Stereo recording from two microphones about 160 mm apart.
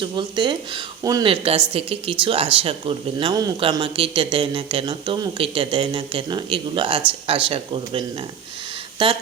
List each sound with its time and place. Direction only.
0.0 s speech: 30° right (ahead or behind)